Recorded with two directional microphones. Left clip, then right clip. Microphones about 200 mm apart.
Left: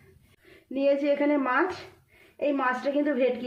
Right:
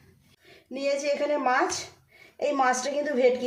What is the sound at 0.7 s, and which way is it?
A woman's voice, 25° left (ahead or behind).